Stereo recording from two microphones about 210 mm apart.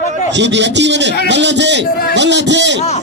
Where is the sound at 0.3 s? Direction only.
55° right (ahead or behind).